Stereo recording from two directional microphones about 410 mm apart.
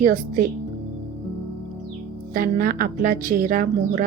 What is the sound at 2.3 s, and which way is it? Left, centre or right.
A woman's voice, right.